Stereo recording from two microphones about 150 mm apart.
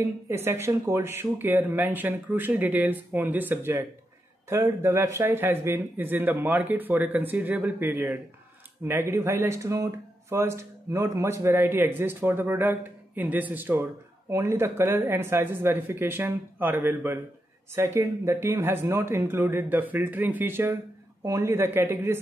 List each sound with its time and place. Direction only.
0.0 s speech: 15° right (ahead or behind)